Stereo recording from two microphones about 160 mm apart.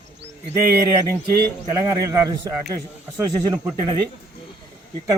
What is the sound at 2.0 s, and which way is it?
A man's voice, 20° right (ahead or behind).